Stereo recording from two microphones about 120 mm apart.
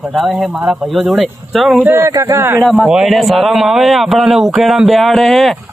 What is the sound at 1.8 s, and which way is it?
Speech, 20° right (ahead or behind).